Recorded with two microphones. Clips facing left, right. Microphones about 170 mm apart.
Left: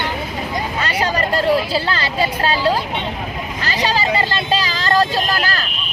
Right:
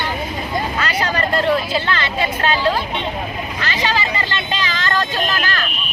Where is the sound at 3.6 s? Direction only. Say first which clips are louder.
Left 2 dB; 35° left (ahead or behind).